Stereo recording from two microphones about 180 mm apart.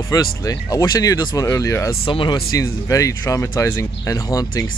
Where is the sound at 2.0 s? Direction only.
30° left (ahead or behind).